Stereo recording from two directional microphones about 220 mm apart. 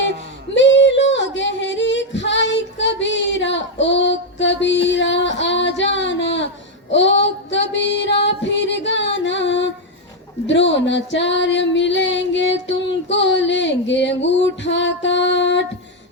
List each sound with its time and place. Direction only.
0.5 s singing: 55° left (ahead or behind)
6.9 s female singing: 55° left (ahead or behind)